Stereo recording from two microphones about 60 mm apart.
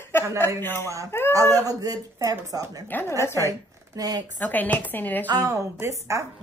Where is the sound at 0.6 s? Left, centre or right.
Left.